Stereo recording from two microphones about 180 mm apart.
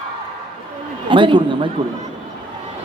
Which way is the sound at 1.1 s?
25° right (ahead or behind).